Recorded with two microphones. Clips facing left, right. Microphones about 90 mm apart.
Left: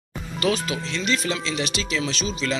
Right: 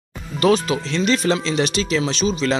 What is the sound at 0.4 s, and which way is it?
Speech, 35° right (ahead or behind).